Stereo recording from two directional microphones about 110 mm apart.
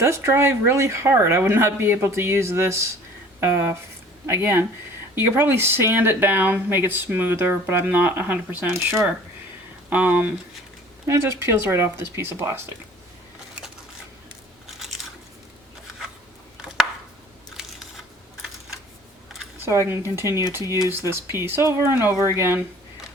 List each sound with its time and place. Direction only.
0.0 s speech: 25° right (ahead or behind)
11.0 s speech: 25° right (ahead or behind)
19.6 s speech: 25° right (ahead or behind)